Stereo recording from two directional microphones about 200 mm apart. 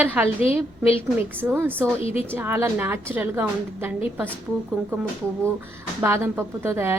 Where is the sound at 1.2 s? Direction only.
10° right (ahead or behind).